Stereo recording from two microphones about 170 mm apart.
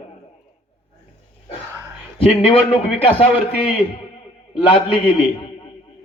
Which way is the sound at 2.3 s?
35° left (ahead or behind).